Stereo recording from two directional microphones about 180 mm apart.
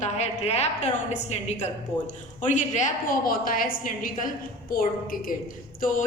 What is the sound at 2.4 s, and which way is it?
A woman's voice, 45° left (ahead or behind).